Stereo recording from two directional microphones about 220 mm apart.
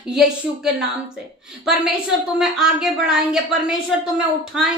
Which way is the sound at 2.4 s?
5° right (ahead or behind).